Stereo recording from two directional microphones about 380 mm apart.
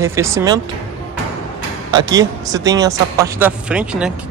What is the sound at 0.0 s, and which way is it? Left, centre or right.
Speech, centre.